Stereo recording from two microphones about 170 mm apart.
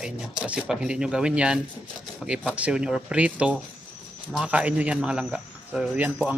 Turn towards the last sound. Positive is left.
turn(degrees=-10)  # may be behind; listen again after turning